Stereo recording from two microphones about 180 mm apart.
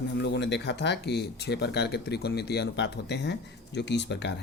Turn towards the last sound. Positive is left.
turn(degrees=70)  # may be behind; listen again after turning